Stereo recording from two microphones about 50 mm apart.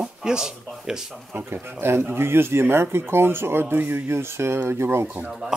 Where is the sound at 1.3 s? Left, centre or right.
Right.